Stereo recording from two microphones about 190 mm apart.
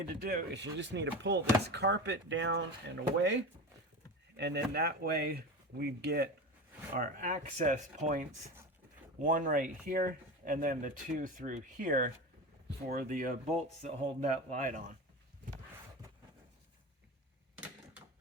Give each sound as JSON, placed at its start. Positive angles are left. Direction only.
{"t": 0.2, "sound": "speech", "side_deg": -60}
{"t": 6.9, "sound": "speech", "side_deg": -45}